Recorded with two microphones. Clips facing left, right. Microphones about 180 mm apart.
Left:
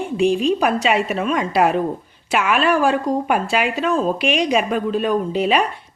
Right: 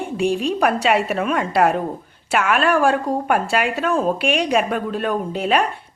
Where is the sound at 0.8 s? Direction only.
60° right (ahead or behind).